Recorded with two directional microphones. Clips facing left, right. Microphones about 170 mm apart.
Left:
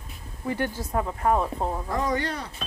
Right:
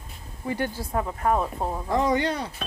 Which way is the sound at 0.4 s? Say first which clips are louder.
Even; 15° right (ahead or behind).